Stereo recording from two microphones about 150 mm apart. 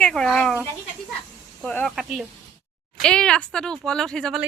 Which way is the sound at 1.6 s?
10° left (ahead or behind).